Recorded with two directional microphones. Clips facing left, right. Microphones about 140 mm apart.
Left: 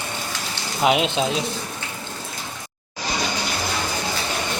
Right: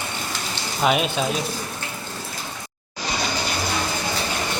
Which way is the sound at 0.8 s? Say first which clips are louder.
Left 2 dB; 15° left (ahead or behind).